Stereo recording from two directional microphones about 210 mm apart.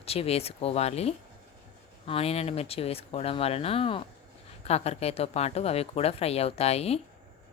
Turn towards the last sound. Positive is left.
turn(degrees=30)  # may be behind; listen again after turning